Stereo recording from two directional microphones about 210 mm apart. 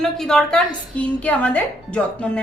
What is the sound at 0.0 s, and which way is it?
A woman's voice, centre (ahead or behind).